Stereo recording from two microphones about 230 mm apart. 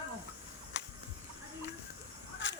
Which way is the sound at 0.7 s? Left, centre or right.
Left.